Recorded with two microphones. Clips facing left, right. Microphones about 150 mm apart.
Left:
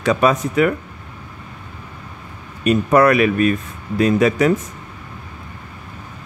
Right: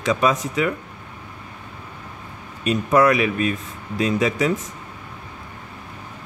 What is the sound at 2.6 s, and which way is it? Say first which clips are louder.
Speech: left 3 dB; 60° left (ahead or behind).